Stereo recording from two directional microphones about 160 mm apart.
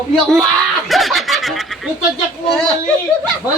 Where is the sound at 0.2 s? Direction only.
Centre (ahead or behind).